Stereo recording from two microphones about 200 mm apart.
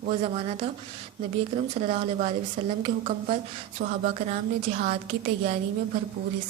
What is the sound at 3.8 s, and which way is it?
A woman's voice, 45° right (ahead or behind).